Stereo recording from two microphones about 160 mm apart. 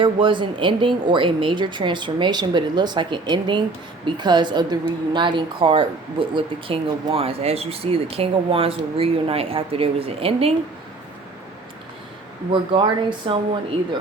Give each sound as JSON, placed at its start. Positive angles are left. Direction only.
{"t": 0.0, "sound": "speech", "side_deg": -30}
{"t": 12.5, "sound": "speech", "side_deg": -30}